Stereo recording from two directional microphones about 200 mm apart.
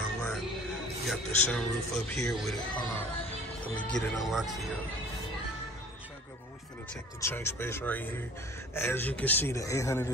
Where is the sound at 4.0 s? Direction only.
Centre (ahead or behind).